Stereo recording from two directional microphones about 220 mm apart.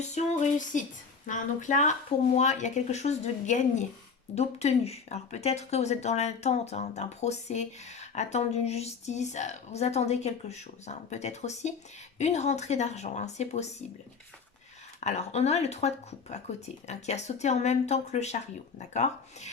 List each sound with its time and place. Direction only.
0.0 s a woman's voice: 30° left (ahead or behind)
15.0 s a woman's voice: 30° left (ahead or behind)